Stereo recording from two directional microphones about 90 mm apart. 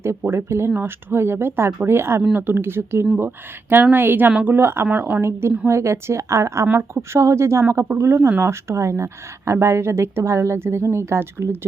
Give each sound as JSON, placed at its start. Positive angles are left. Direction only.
{"t": 0.3, "sound": "speech", "side_deg": -30}
{"t": 4.5, "sound": "speech", "side_deg": -25}